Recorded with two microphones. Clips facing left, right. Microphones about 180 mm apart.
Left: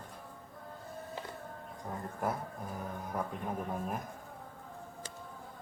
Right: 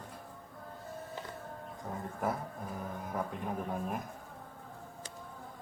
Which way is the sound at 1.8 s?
Centre (ahead or behind).